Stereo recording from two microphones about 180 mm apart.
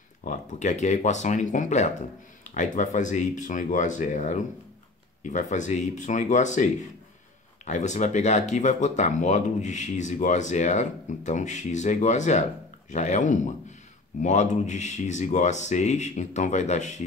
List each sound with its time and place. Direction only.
0.2 s speech: 45° left (ahead or behind)